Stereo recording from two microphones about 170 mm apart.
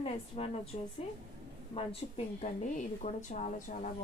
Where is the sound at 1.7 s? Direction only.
40° left (ahead or behind).